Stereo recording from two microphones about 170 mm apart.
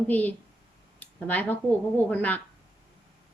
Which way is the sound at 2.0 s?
10° left (ahead or behind).